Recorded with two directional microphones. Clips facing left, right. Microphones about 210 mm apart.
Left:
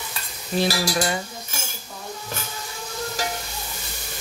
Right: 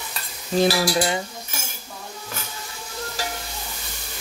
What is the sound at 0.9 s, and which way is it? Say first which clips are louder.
Speech: right 2 dB; 20° right (ahead or behind).